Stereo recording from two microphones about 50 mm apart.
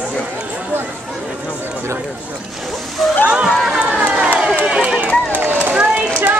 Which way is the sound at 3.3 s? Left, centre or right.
Right.